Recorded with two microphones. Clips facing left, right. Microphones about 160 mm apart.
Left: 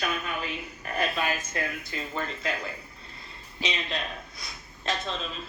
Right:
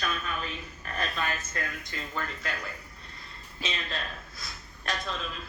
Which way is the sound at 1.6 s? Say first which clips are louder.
Left 4 dB; 25° left (ahead or behind).